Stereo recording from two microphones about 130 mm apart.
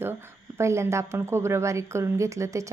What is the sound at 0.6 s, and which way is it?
A woman's voice, 20° right (ahead or behind).